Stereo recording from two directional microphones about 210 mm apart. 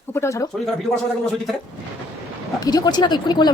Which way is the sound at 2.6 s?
20° left (ahead or behind).